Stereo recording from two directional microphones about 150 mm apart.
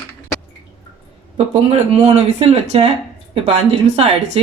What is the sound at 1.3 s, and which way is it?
Speech, 40° right (ahead or behind).